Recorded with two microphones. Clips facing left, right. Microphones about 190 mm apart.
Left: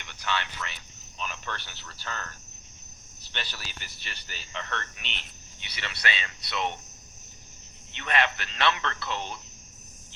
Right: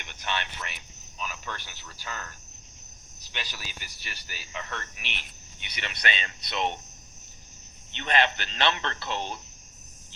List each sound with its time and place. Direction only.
0.0 s a sound: 20° right (ahead or behind)
1.2 s speech: 10° right (ahead or behind)
3.3 s speech: 10° right (ahead or behind)
5.7 s speech: 20° right (ahead or behind)
7.9 s speech: 25° right (ahead or behind)